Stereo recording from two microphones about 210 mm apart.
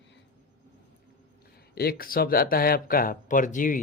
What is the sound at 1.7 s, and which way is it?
Speech, 45° left (ahead or behind).